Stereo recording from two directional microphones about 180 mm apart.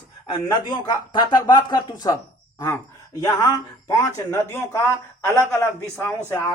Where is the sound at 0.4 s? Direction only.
25° left (ahead or behind).